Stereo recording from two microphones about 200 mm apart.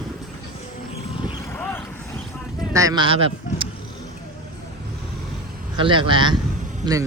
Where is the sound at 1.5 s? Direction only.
10° left (ahead or behind).